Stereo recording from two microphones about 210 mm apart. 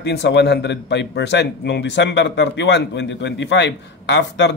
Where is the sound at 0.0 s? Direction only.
55° left (ahead or behind).